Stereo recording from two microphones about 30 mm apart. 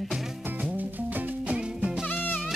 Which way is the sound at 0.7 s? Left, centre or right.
Right.